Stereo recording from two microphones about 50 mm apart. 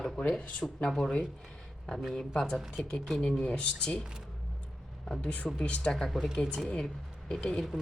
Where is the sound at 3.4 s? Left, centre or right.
Left.